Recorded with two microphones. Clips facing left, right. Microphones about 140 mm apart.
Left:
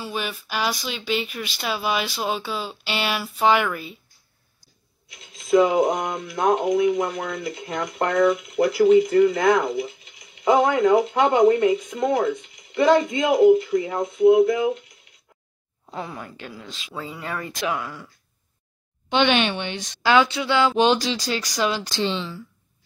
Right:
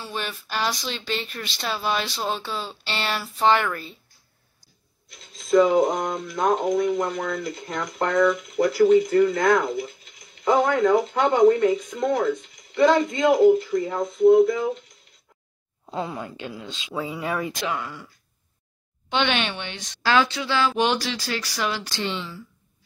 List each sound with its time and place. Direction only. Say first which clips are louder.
0.0 s speech: left 2 dB; 5° left (ahead or behind)
5.1 s speech: even; centre (ahead or behind)
16.0 s speech: right 3 dB; 20° right (ahead or behind)
16.9 s speech: right 4 dB; 10° right (ahead or behind)
19.0 s speech: left 4 dB; 15° left (ahead or behind)